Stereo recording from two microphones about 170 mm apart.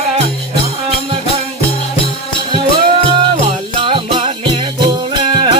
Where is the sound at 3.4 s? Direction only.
30° right (ahead or behind).